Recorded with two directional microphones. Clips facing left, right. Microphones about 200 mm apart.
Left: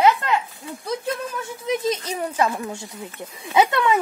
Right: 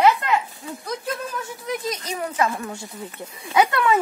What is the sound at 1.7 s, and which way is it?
Speech, 25° left (ahead or behind).